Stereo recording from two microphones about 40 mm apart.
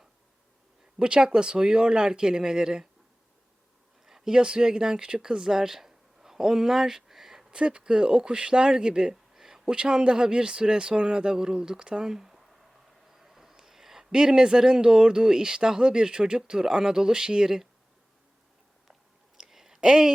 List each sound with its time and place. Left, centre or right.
0.9 s speech: right
4.0 s speech: centre
7.5 s speech: right
19.4 s a sound: centre